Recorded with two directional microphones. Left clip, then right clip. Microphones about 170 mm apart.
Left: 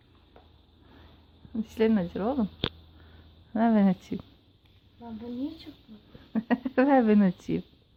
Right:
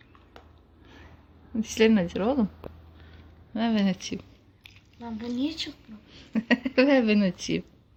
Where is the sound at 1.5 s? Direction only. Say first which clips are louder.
Right 4 dB; 5° left (ahead or behind).